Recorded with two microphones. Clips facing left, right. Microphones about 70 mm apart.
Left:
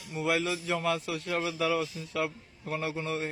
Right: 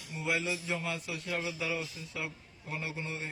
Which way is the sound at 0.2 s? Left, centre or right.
Left.